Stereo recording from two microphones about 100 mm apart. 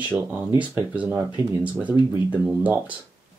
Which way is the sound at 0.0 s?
15° right (ahead or behind).